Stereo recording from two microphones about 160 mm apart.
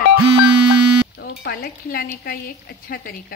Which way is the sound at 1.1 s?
90° left.